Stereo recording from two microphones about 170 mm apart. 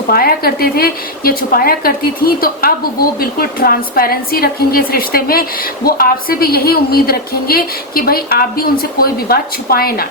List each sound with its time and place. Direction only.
0.1 s a woman's voice: 60° left (ahead or behind)